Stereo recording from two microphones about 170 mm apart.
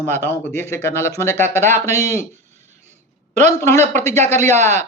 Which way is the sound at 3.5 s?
15° left (ahead or behind).